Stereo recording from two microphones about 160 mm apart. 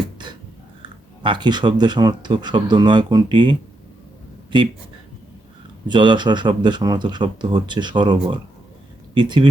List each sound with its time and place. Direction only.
0.8 s speech: 30° right (ahead or behind)
4.5 s speech: 30° right (ahead or behind)
5.9 s speech: 30° right (ahead or behind)